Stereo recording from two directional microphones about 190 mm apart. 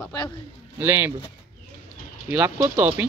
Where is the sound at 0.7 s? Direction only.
10° right (ahead or behind).